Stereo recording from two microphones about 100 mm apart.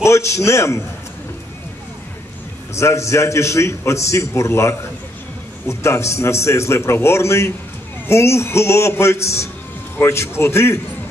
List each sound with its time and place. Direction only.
0.0 s a man's voice: 30° left (ahead or behind)
2.7 s a man's voice: 30° left (ahead or behind)